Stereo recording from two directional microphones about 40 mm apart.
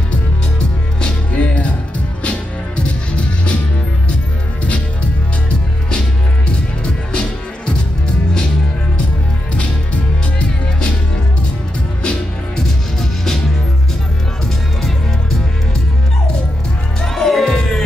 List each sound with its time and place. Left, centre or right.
1.0 s music: left
6.8 s music: left
12.5 s music: centre
14.8 s music: centre
17.0 s music: centre